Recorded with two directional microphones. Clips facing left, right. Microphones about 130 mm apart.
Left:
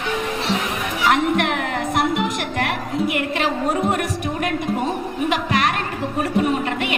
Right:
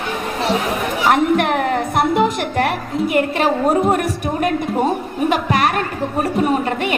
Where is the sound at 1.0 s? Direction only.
40° right (ahead or behind).